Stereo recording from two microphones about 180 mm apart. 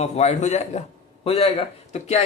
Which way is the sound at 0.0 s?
40° left (ahead or behind).